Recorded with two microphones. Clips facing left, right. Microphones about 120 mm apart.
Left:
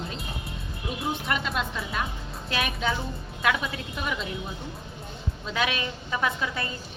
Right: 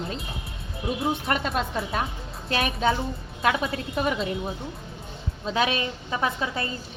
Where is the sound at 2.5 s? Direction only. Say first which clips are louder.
Right 4 dB; 35° right (ahead or behind).